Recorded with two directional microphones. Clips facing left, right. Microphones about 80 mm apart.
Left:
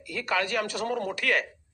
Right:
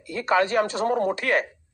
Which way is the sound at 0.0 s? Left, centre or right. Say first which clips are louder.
Right 7 dB; right.